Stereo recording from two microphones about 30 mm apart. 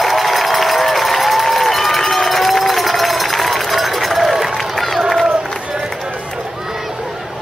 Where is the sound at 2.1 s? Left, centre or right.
Centre.